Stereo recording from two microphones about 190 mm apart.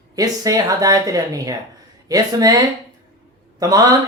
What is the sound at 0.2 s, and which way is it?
Speech, 20° right (ahead or behind).